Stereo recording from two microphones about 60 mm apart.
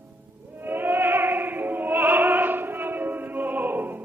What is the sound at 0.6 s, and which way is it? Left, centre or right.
Opera, right.